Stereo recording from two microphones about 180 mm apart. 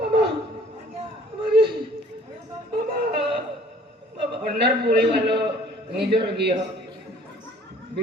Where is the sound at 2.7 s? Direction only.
60° right (ahead or behind).